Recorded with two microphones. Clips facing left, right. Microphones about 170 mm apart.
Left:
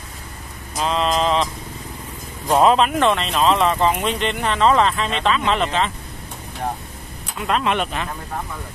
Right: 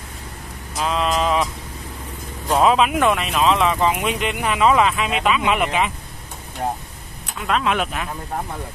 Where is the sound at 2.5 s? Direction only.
5° right (ahead or behind).